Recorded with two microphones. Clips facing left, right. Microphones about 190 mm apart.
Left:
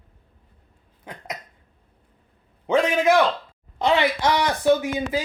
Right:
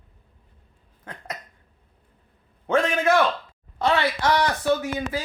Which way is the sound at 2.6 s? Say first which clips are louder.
Left 2 dB; 15° left (ahead or behind).